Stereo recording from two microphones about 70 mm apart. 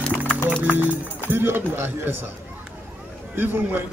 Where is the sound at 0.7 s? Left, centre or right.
Right.